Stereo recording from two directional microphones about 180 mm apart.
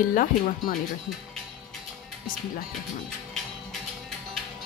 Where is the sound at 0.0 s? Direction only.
50° left (ahead or behind).